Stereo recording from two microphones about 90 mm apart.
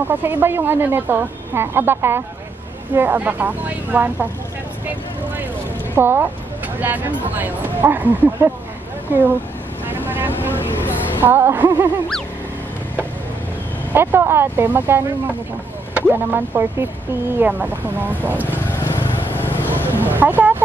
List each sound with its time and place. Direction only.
0.1 s speech: 20° right (ahead or behind)
5.9 s speech: 25° right (ahead or behind)
10.0 s vehicle: 20° right (ahead or behind)
11.2 s speech: 25° right (ahead or behind)
13.9 s speech: 25° right (ahead or behind)
18.5 s vehicle: 25° left (ahead or behind)
19.9 s a sound: 20° right (ahead or behind)